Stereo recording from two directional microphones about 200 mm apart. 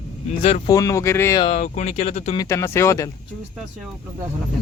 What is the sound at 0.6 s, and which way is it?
Speech, 15° left (ahead or behind).